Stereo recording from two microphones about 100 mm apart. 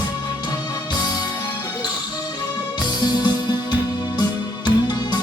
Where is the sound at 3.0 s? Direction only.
45° left (ahead or behind).